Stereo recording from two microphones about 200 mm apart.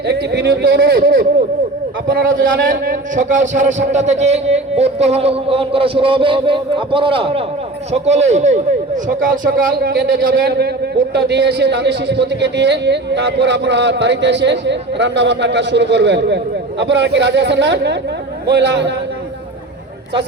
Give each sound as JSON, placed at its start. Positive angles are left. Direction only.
{"t": 0.0, "sound": "a man's voice", "side_deg": -55}